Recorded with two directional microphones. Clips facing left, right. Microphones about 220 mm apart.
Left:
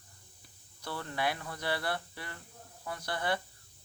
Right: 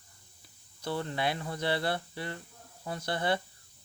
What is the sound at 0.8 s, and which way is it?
Speech, 25° right (ahead or behind).